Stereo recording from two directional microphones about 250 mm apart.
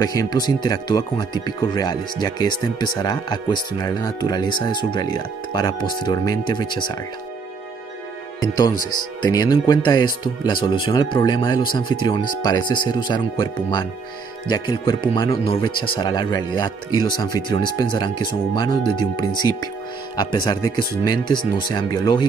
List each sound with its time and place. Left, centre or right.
0.0 s speech: centre
8.4 s speech: centre